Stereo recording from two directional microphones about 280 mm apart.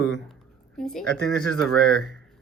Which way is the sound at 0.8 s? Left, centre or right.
Centre.